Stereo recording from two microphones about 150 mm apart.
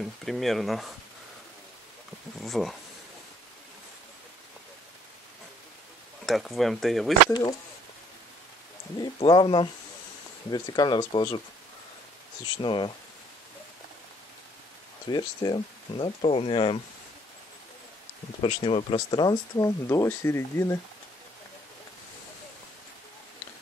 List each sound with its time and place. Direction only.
0.0 s speech: centre (ahead or behind)
2.4 s speech: centre (ahead or behind)
6.2 s speech: centre (ahead or behind)
8.9 s speech: 30° left (ahead or behind)
12.6 s speech: 35° left (ahead or behind)
15.0 s speech: 30° left (ahead or behind)
18.4 s speech: 35° left (ahead or behind); by 20.8 s 20° left (ahead or behind)